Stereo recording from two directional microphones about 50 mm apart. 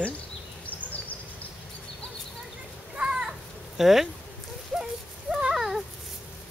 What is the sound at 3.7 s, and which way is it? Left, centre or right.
Speech, centre.